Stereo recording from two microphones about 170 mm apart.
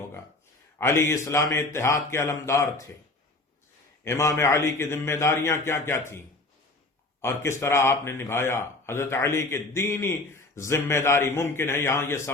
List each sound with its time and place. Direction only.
0.8 s speech: 15° left (ahead or behind)
4.0 s speech: 15° left (ahead or behind)